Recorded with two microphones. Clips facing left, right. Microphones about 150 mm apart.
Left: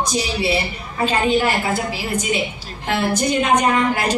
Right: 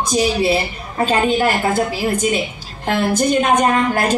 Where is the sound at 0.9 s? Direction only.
45° right (ahead or behind).